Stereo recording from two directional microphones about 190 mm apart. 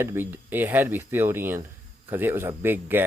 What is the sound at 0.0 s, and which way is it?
Speech, 10° right (ahead or behind).